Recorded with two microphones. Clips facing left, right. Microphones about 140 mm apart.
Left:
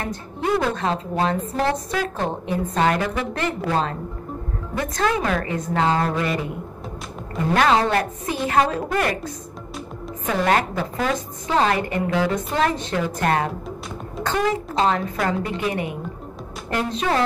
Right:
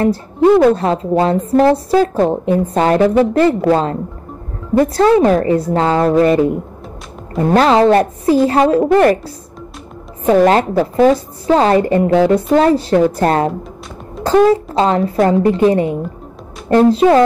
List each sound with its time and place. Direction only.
0.0 s a woman's voice: 35° right (ahead or behind)
10.2 s a woman's voice: 35° right (ahead or behind)